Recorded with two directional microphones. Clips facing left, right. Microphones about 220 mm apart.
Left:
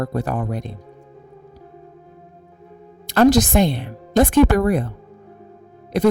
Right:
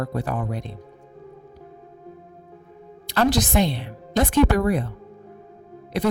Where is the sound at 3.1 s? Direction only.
45° left (ahead or behind).